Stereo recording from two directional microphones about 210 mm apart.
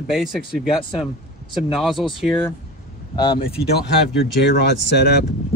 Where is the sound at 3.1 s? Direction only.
20° left (ahead or behind).